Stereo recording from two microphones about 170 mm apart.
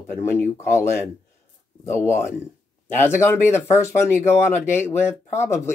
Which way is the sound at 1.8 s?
15° left (ahead or behind).